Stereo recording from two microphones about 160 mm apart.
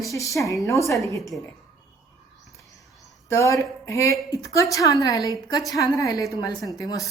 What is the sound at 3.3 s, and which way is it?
A woman's voice, 20° left (ahead or behind).